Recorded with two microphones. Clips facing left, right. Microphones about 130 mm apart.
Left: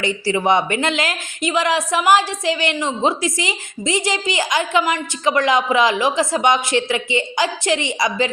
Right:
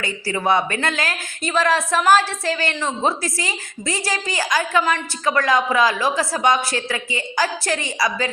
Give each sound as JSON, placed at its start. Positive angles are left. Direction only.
{"t": 0.0, "sound": "a woman's voice", "side_deg": 20}